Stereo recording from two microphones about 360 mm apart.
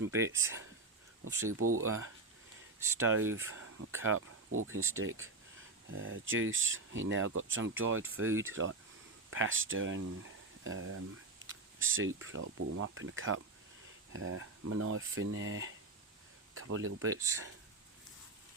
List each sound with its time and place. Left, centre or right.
1.2 s speech: right